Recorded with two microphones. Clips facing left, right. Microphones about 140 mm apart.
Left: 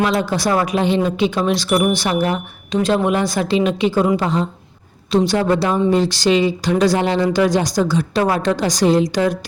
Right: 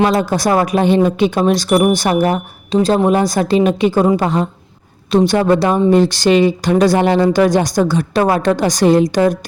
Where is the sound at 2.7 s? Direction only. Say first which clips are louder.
Right 4 dB; 35° right (ahead or behind).